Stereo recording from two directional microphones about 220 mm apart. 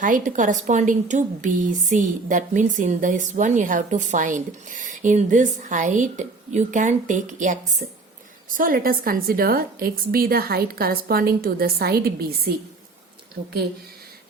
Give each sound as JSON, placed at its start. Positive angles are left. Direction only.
{"t": 0.0, "sound": "a woman's voice", "side_deg": -35}